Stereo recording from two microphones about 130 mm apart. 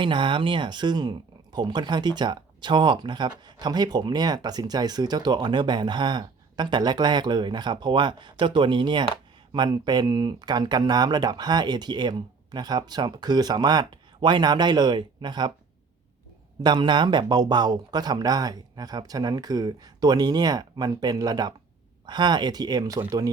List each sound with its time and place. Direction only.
0.0 s speech: 40° right (ahead or behind)
16.6 s speech: 35° right (ahead or behind)